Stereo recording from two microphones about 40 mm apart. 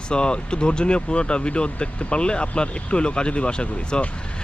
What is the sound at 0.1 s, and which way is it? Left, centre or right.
Speech, left.